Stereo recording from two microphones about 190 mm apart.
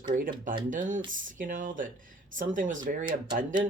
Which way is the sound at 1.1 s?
45° right (ahead or behind).